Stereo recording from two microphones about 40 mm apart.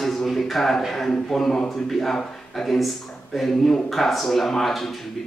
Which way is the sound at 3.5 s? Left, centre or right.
Centre.